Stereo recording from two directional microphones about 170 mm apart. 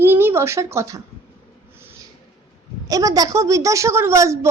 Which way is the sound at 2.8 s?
20° right (ahead or behind).